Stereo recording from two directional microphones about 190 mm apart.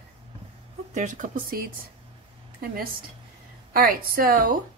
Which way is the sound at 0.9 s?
40° right (ahead or behind).